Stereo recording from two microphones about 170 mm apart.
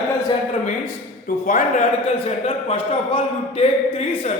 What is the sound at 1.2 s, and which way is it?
Speech, 50° left (ahead or behind).